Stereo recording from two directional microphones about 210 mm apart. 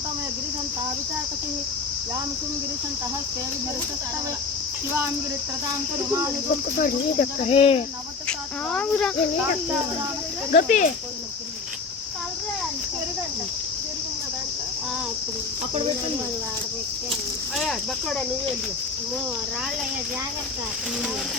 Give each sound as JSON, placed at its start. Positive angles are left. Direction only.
{"t": 6.7, "sound": "speech", "side_deg": 40}
{"t": 7.5, "sound": "speech", "side_deg": 25}
{"t": 8.3, "sound": "speech", "side_deg": 5}
{"t": 10.5, "sound": "speech", "side_deg": 40}